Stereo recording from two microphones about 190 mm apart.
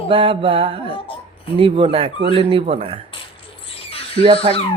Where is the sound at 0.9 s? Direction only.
30° left (ahead or behind).